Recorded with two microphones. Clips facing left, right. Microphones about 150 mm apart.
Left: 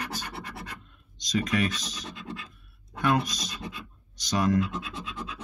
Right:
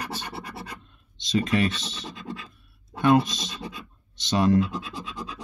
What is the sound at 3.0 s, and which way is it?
Speech, 25° right (ahead or behind).